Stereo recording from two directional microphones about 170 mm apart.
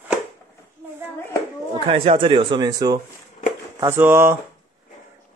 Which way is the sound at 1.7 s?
35° right (ahead or behind).